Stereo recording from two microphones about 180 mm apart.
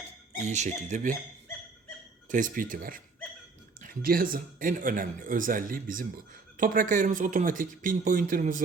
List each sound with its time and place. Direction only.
0.4 s speech: 40° right (ahead or behind)
2.3 s speech: 50° right (ahead or behind)